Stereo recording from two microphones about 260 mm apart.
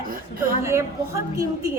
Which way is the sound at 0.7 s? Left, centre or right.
Centre.